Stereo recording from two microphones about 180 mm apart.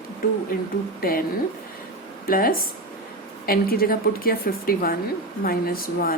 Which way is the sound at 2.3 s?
55° left (ahead or behind).